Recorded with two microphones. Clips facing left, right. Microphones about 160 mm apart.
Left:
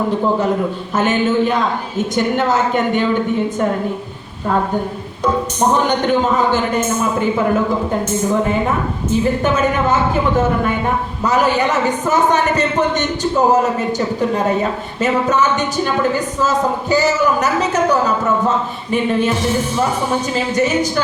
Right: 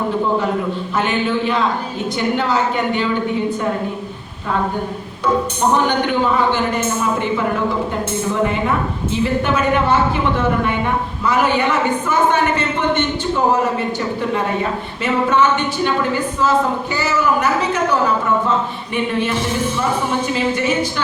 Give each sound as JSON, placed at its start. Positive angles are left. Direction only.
{"t": 0.9, "sound": "a woman's voice", "side_deg": 45}
{"t": 6.1, "sound": "a woman's voice", "side_deg": 45}
{"t": 9.0, "sound": "a woman's voice", "side_deg": 45}